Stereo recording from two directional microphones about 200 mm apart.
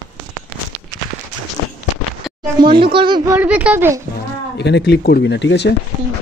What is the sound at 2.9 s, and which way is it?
Speech, 25° right (ahead or behind).